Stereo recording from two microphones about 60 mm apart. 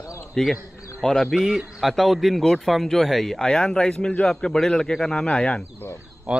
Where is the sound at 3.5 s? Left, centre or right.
Centre.